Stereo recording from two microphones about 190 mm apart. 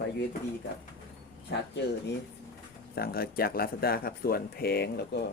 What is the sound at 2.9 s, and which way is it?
Speech, 55° left (ahead or behind).